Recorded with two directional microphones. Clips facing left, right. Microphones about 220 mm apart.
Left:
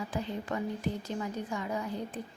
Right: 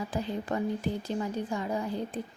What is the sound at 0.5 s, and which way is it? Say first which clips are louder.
Speech: right 3 dB; 35° right (ahead or behind).